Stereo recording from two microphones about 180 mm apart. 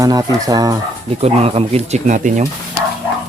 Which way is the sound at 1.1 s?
35° right (ahead or behind).